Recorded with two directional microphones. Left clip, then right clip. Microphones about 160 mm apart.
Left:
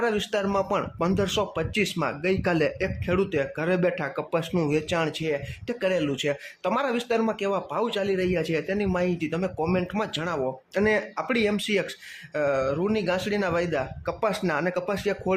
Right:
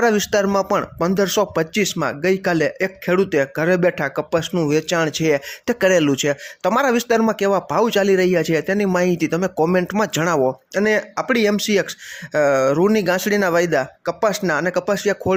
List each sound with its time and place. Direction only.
0.0 s speech: 35° right (ahead or behind)
10.8 s speech: 30° right (ahead or behind)